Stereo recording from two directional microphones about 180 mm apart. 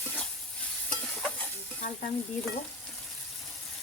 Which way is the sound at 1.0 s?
5° left (ahead or behind).